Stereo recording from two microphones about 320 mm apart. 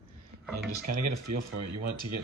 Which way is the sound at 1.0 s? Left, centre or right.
Right.